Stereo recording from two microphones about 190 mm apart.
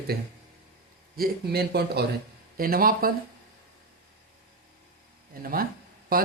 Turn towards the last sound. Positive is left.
turn(degrees=-50)  # may be behind; listen again after turning